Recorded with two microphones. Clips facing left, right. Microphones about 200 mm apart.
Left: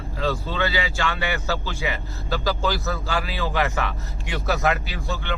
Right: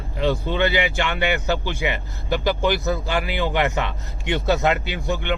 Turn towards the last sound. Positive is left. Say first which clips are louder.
# right 5 dB
turn(degrees=-20)  # may be behind; listen again after turning